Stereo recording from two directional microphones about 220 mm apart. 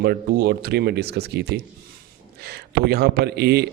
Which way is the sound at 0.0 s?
45° right (ahead or behind).